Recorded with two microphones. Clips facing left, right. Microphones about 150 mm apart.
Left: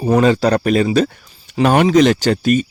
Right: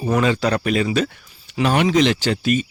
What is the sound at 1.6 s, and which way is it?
Speech, 45° left (ahead or behind).